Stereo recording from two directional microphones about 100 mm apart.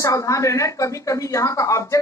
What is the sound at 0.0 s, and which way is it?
A woman's voice, 35° left (ahead or behind).